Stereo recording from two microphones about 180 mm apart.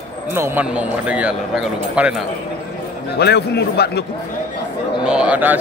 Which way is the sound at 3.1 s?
65° left (ahead or behind).